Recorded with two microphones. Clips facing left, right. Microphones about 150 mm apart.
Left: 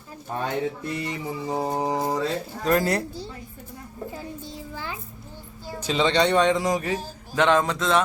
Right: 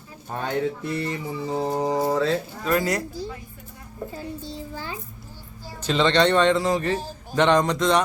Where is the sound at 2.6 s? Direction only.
40° left (ahead or behind).